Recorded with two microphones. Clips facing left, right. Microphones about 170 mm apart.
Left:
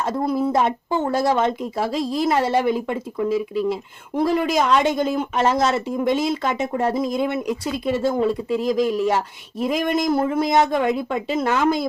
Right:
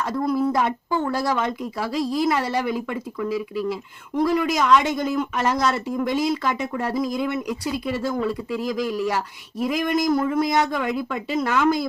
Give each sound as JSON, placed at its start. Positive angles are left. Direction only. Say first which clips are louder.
{"t": 0.0, "sound": "a woman's voice", "louder": "left 1 dB", "side_deg": 25}